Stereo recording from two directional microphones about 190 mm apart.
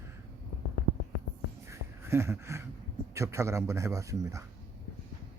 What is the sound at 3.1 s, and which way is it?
Speech, 15° right (ahead or behind).